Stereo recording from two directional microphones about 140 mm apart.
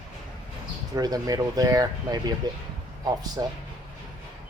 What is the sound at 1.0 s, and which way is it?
Speech, 25° right (ahead or behind).